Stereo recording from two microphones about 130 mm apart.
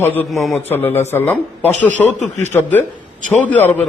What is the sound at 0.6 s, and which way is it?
A man's voice, 15° left (ahead or behind).